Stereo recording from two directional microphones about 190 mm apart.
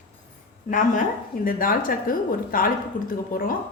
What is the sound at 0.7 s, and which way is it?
A woman's voice, 45° left (ahead or behind).